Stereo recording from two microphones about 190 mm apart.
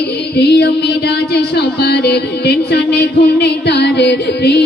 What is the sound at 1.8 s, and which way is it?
Music, 60° left (ahead or behind).